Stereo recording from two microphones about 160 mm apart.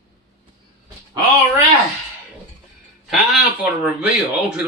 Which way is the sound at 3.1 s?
5° right (ahead or behind).